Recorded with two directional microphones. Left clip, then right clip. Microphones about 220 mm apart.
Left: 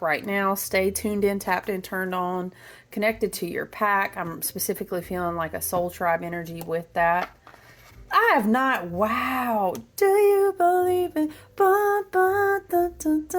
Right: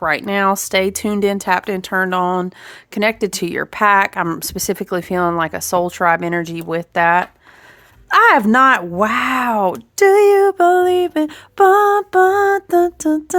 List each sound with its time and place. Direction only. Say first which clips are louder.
0.0 s speech: right 8 dB; 30° right (ahead or behind)